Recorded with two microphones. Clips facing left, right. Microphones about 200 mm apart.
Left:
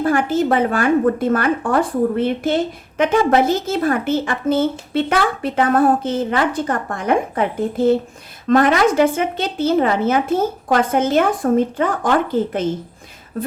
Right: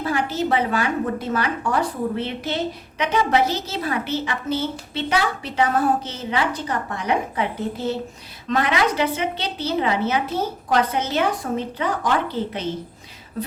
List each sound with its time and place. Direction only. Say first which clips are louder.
0.0 s a woman's voice: left 6 dB; 50° left (ahead or behind)